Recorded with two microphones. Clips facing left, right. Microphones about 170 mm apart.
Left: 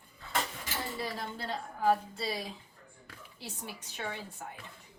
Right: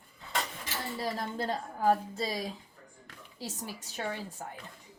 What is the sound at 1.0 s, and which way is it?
A woman's voice, 45° right (ahead or behind).